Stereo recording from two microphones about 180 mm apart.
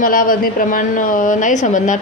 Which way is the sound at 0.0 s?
50° left (ahead or behind).